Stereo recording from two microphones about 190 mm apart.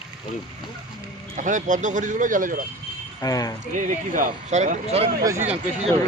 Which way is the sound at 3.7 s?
45° right (ahead or behind).